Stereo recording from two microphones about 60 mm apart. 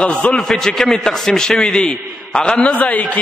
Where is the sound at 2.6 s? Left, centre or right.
Left.